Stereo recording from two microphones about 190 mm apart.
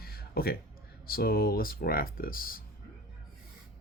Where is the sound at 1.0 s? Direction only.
50° left (ahead or behind).